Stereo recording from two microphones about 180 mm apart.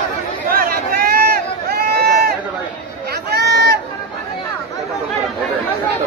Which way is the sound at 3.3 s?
70° right (ahead or behind).